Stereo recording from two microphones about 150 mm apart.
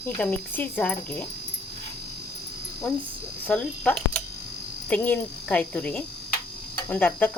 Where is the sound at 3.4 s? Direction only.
10° left (ahead or behind).